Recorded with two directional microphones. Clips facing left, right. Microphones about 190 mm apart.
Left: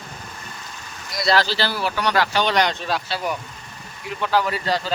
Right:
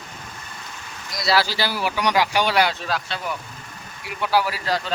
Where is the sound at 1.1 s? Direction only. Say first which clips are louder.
Left 1 dB; 5° right (ahead or behind).